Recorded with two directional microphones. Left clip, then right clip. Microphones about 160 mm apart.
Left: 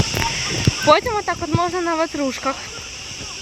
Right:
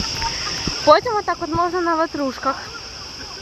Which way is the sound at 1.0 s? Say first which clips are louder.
Right 1 dB; 25° left (ahead or behind).